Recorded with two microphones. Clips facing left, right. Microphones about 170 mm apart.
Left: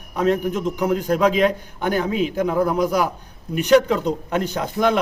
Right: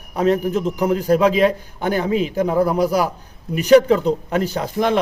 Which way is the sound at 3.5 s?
5° right (ahead or behind).